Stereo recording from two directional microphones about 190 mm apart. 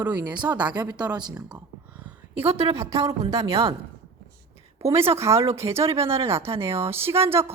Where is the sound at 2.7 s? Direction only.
15° right (ahead or behind).